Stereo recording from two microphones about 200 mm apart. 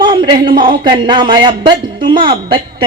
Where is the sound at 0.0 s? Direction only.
20° right (ahead or behind).